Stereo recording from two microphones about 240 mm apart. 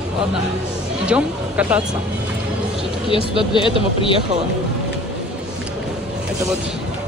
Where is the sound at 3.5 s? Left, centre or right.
Left.